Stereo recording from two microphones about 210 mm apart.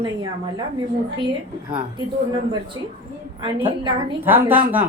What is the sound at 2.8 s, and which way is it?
Speech, 15° right (ahead or behind).